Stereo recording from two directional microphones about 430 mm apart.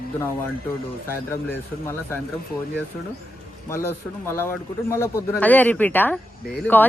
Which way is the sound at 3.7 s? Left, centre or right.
Centre.